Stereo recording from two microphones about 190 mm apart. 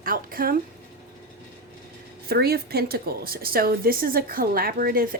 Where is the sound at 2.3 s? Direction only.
55° right (ahead or behind).